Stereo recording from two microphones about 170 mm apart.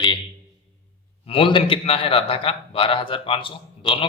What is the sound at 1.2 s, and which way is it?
A man's voice, 35° left (ahead or behind).